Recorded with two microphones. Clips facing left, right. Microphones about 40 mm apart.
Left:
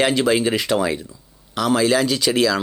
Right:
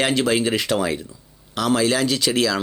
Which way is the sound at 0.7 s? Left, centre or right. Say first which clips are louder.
Left 3 dB; left.